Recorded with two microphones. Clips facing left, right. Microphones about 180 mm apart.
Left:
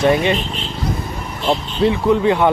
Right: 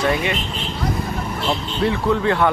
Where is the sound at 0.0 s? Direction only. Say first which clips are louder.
Left 5 dB; 30° left (ahead or behind).